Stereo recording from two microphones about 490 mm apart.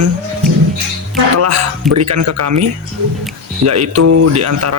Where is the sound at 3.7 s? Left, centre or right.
Right.